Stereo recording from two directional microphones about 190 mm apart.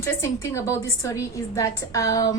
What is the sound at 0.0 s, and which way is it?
A woman's voice, 15° left (ahead or behind).